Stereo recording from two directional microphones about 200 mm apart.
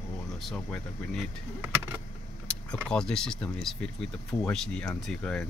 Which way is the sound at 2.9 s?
5° left (ahead or behind).